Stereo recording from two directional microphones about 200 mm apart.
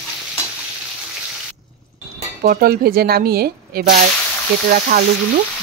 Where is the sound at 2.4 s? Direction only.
45° right (ahead or behind).